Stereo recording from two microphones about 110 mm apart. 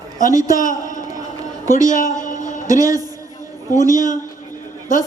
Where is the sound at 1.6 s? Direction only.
30° right (ahead or behind).